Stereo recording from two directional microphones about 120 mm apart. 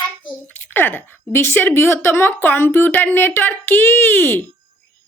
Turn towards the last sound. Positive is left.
turn(degrees=15)  # may be behind; listen again after turning